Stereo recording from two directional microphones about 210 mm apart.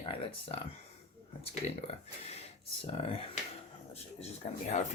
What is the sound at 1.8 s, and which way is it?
Speech, 30° left (ahead or behind).